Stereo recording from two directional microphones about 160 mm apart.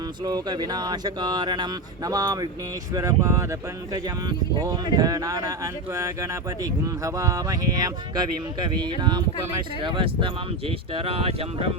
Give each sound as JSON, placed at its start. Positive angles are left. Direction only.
{"t": 0.3, "sound": "speech", "side_deg": -25}
{"t": 7.0, "sound": "speech", "side_deg": -20}